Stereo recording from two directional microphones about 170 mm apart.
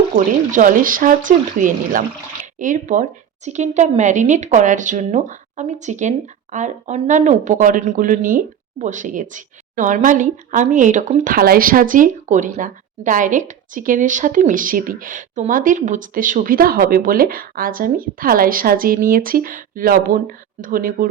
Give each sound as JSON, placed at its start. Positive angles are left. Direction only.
{"t": 0.5, "sound": "a woman's voice", "side_deg": -55}